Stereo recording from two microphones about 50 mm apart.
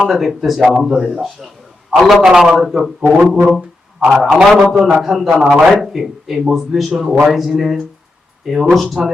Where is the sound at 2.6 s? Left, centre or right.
Centre.